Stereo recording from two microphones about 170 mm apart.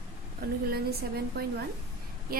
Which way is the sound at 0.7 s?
65° right (ahead or behind).